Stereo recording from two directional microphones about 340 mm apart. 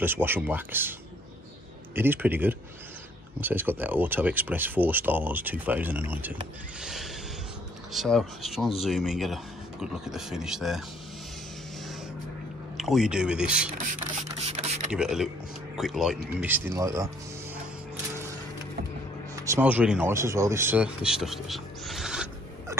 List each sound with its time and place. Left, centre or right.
0.0 s speech: centre
2.0 s speech: centre
12.7 s speech: centre
14.4 s mechanisms: centre
14.9 s speech: centre
19.4 s speech: centre